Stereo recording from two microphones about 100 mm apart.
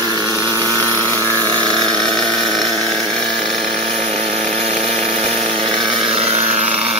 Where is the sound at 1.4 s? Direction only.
40° right (ahead or behind).